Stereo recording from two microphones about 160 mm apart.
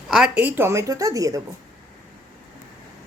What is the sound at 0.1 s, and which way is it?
A woman's voice, 5° right (ahead or behind).